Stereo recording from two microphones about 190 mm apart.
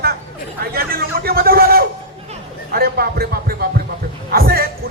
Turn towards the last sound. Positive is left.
turn(degrees=-55)  # may be behind; listen again after turning